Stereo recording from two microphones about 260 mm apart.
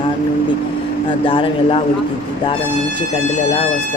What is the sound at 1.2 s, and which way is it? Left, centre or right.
Speech, centre.